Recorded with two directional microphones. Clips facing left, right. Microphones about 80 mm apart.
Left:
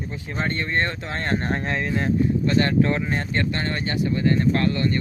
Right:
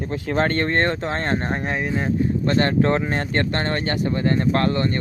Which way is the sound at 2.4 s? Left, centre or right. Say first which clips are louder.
Right 3 dB; right.